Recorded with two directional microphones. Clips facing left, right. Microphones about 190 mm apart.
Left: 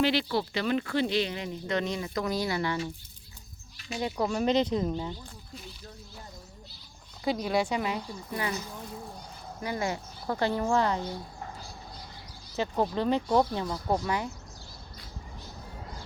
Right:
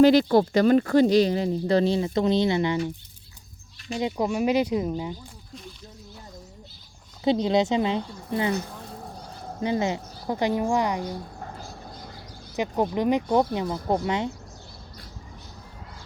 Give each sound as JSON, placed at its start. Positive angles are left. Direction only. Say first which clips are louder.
{"t": 0.0, "sound": "speech", "louder": "right 10 dB", "side_deg": -45}
{"t": 4.0, "sound": "a woman's voice", "louder": "right 3 dB", "side_deg": -15}
{"t": 7.3, "sound": "speech", "louder": "right 6 dB", "side_deg": -25}
{"t": 9.6, "sound": "a woman's voice", "louder": "right 6 dB", "side_deg": -25}
{"t": 12.5, "sound": "a woman's voice", "louder": "right 3 dB", "side_deg": -15}